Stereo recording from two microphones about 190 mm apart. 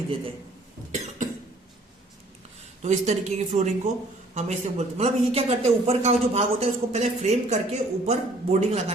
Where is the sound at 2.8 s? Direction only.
35° right (ahead or behind).